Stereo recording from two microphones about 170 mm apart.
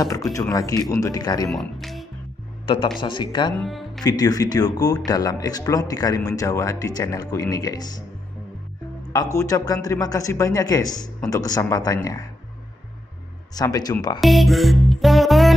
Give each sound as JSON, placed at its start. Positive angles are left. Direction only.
{"t": 0.3, "sound": "speech", "side_deg": 20}
{"t": 1.5, "sound": "music", "side_deg": 0}
{"t": 2.6, "sound": "speech", "side_deg": 30}
{"t": 3.5, "sound": "music", "side_deg": 0}
{"t": 4.0, "sound": "speech", "side_deg": 20}
{"t": 9.1, "sound": "speech", "side_deg": 20}
{"t": 13.6, "sound": "speech", "side_deg": 20}
{"t": 14.2, "sound": "music", "side_deg": 0}